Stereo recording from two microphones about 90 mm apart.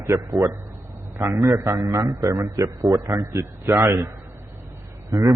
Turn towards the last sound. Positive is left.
turn(degrees=-35)  # may be behind; listen again after turning